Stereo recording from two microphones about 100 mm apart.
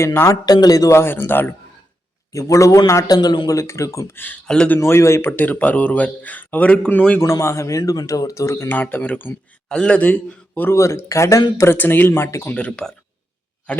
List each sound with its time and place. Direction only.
0.0 s speech: 25° left (ahead or behind)
0.4 s speech: 40° left (ahead or behind)
0.9 s speech: 20° left (ahead or behind)
2.3 s speech: 35° left (ahead or behind)
3.2 s speech: 45° left (ahead or behind); by 4.4 s 20° left (ahead or behind)
4.4 s speech: 10° left (ahead or behind)
4.8 s speech: 25° left (ahead or behind)
5.4 s speech: 15° left (ahead or behind)
7.2 s speech: 30° left (ahead or behind)
9.6 s speech: 10° left (ahead or behind)
10.8 s speech: 30° left (ahead or behind)
12.5 s speech: 10° left (ahead or behind)